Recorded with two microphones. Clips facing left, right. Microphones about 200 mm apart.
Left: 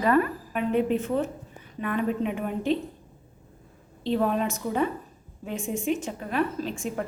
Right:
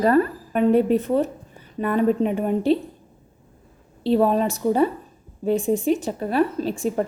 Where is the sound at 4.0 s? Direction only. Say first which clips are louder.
Right 6 dB; 35° right (ahead or behind).